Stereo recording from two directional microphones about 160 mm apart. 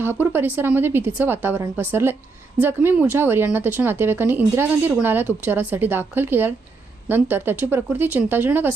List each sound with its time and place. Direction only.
0.0 s speech: 15° right (ahead or behind)